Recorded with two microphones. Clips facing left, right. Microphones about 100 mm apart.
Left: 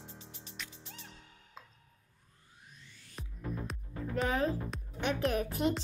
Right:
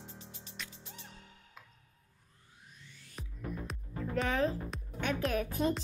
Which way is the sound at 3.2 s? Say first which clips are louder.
Even; centre (ahead or behind).